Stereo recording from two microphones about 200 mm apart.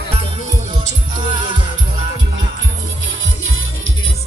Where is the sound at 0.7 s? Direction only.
25° right (ahead or behind).